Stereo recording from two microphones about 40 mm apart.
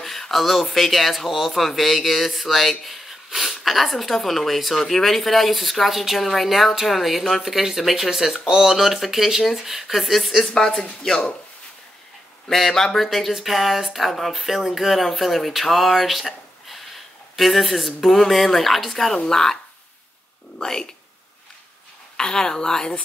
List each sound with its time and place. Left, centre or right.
0.0 s speech: centre
10.5 s speech: centre
12.4 s speech: centre
22.1 s speech: centre